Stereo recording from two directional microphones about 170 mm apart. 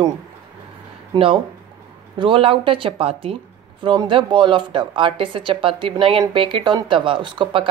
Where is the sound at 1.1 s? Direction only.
30° right (ahead or behind).